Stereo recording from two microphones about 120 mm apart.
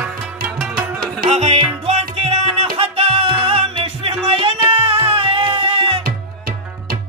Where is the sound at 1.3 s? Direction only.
65° right (ahead or behind).